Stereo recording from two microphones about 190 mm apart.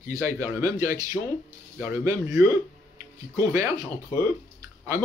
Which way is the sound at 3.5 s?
15° right (ahead or behind).